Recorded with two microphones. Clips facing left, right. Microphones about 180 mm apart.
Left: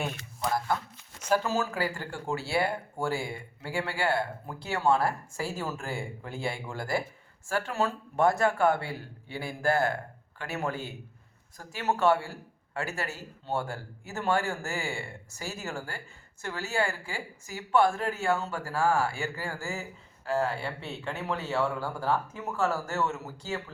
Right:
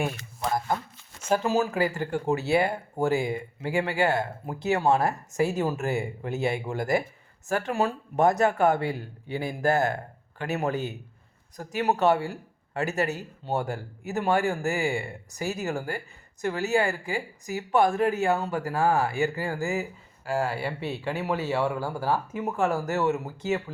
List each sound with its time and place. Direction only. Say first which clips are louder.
1.2 s speech: right 3 dB; 20° right (ahead or behind)